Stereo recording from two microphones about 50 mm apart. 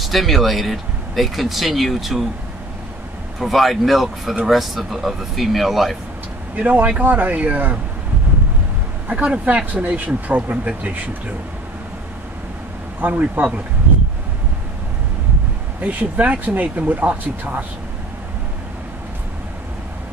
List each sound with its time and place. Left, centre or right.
0.0 s speech: centre
3.3 s speech: centre
6.5 s speech: right
9.0 s speech: right
13.0 s speech: right
15.8 s speech: right